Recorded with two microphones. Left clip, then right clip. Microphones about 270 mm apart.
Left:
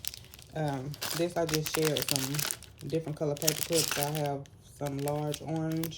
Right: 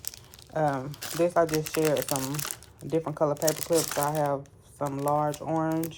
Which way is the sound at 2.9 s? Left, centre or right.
Centre.